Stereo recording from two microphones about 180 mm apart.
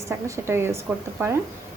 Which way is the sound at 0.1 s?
15° right (ahead or behind).